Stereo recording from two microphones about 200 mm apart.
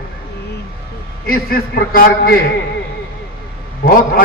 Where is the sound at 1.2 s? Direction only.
50° left (ahead or behind).